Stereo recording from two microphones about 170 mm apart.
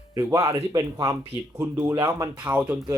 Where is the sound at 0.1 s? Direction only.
15° right (ahead or behind).